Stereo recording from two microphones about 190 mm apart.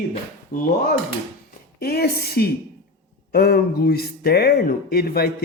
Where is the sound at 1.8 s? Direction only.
55° left (ahead or behind).